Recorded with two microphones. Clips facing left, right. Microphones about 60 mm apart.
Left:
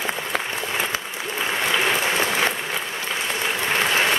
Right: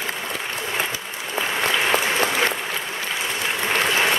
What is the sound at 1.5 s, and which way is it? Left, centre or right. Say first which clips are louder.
Applause: right 1 dB; centre.